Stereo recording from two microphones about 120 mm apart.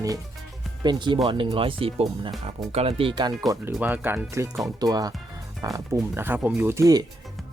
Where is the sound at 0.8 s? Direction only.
40° right (ahead or behind).